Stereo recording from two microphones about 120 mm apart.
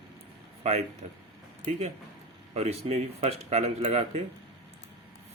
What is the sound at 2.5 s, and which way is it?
Speech, 60° right (ahead or behind).